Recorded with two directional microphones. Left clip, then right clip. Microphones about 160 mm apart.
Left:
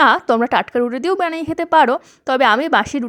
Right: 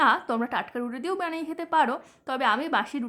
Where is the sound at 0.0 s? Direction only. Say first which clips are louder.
Left 10 dB; 50° left (ahead or behind).